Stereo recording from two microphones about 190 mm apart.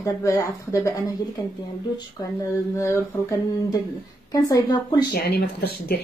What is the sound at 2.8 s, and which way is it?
A woman's voice, 15° left (ahead or behind).